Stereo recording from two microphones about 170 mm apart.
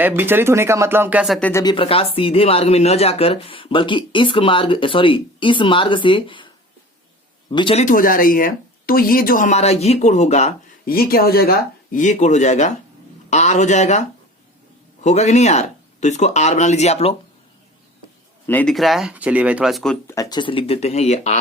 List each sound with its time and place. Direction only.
0.0 s speech: 10° right (ahead or behind)
1.4 s speech: 10° left (ahead or behind)
1.6 s speech: 30° left (ahead or behind)
7.5 s speech: 30° left (ahead or behind)
7.9 s speech: 55° left (ahead or behind)
10.8 s speech: 60° left (ahead or behind); by 14.0 s 40° left (ahead or behind)
15.0 s speech: 40° left (ahead or behind)
18.4 s speech: 10° left (ahead or behind)
20.1 s speech: 20° left (ahead or behind); by 21.3 s 40° left (ahead or behind)